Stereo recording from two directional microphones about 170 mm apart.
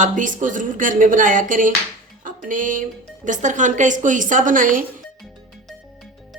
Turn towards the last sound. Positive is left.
turn(degrees=-50)  # may be behind; listen again after turning